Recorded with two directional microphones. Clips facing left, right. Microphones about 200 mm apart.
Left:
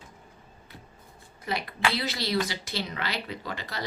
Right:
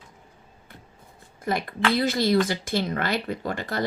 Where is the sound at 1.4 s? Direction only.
50° right (ahead or behind).